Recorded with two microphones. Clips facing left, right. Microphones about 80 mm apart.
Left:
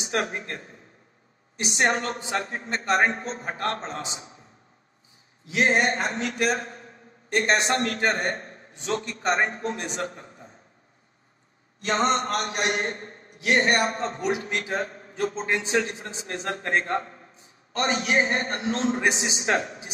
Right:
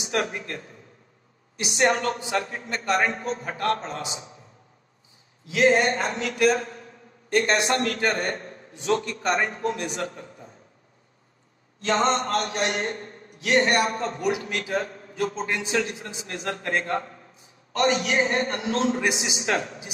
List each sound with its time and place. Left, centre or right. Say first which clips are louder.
0.0 s a man's voice: right 1 dB; left
5.4 s a man's voice: right 3 dB; left
11.8 s a man's voice: right 1 dB; left